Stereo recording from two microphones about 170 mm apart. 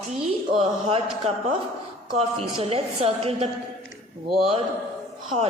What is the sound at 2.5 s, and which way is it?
A woman's voice, 35° right (ahead or behind).